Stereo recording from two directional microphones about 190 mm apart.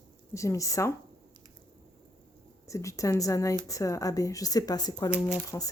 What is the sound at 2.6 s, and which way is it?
Speech, 15° left (ahead or behind).